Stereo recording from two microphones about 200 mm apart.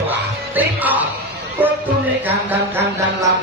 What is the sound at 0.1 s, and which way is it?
Music, 10° right (ahead or behind).